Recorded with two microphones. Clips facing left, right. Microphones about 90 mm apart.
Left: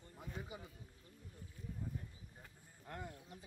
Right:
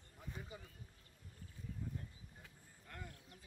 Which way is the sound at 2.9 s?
25° left (ahead or behind).